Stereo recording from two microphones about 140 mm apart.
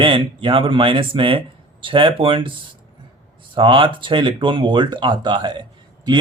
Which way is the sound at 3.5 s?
35° right (ahead or behind).